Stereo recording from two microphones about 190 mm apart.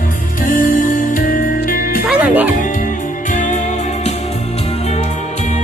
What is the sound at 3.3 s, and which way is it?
Music, 40° left (ahead or behind).